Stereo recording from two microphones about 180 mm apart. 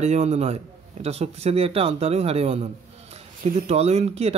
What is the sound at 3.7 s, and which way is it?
Speech, 35° right (ahead or behind).